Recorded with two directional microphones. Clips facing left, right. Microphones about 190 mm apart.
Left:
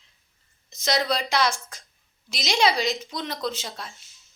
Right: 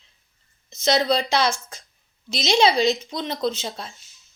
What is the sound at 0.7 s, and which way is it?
A woman's voice, 25° right (ahead or behind).